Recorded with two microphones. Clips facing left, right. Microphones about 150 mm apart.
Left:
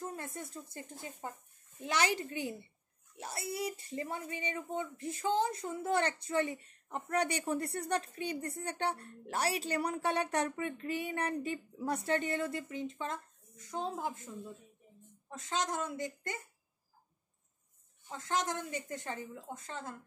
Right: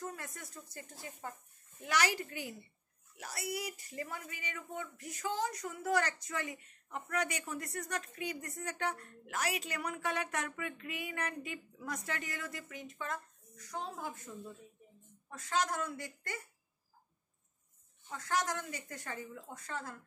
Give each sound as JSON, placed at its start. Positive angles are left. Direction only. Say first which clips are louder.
{"t": 0.0, "sound": "a woman's voice", "louder": "left 3 dB", "side_deg": 25}
{"t": 15.3, "sound": "speech", "louder": "right 1 dB", "side_deg": 20}
{"t": 18.1, "sound": "speech", "louder": "left 1 dB", "side_deg": 25}